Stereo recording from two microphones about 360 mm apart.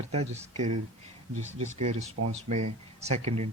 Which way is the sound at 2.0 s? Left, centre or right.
Right.